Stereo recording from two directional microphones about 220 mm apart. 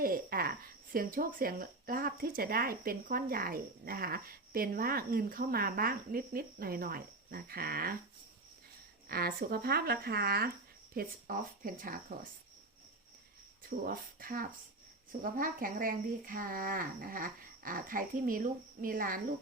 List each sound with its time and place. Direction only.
0.0 s speech: 40° right (ahead or behind)
9.0 s speech: 45° right (ahead or behind)
13.6 s speech: 40° right (ahead or behind)